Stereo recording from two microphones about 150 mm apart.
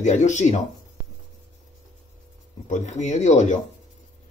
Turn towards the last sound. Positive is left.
turn(degrees=50)  # may be behind; listen again after turning